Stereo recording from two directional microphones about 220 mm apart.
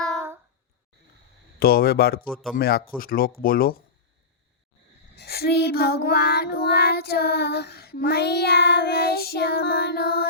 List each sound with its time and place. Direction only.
1.5 s child singing: 45° left (ahead or behind)
2.6 s speech: 45° left (ahead or behind)
5.1 s child singing: 45° left (ahead or behind)